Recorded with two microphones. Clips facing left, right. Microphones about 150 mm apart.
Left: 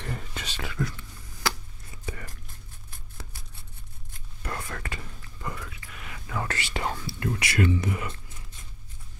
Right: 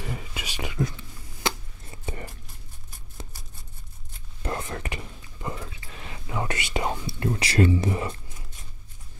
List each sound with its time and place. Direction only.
0.0 s whispering: 5° right (ahead or behind); by 2.3 s 30° right (ahead or behind)
4.4 s whispering: 25° right (ahead or behind)